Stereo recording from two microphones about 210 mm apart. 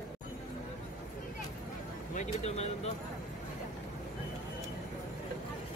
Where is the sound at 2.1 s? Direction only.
35° left (ahead or behind).